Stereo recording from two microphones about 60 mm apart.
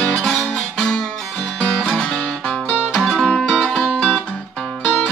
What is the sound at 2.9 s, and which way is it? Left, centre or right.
Music, centre.